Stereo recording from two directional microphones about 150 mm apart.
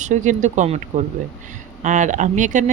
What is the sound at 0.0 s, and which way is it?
Speech, 55° right (ahead or behind).